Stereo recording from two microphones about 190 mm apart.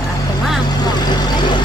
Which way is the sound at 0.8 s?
20° left (ahead or behind).